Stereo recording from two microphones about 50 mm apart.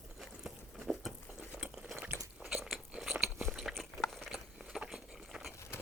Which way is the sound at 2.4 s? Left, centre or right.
Centre.